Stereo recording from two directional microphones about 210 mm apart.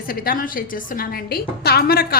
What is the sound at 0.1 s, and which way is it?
A woman's voice, 45° left (ahead or behind).